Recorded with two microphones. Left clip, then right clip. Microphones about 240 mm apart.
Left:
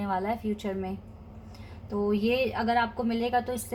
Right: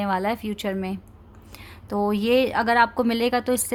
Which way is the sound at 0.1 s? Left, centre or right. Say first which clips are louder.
Right 5 dB; right.